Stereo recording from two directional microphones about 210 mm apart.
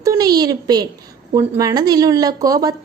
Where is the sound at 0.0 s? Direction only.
15° right (ahead or behind).